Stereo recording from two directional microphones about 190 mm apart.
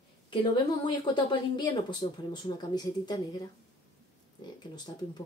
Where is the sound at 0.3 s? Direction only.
25° left (ahead or behind).